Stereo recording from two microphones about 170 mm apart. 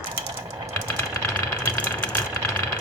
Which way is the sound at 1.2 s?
10° left (ahead or behind).